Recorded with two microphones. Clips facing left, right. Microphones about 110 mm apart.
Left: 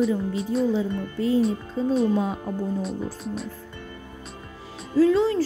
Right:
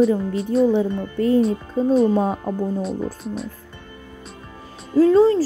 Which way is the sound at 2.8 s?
Centre (ahead or behind).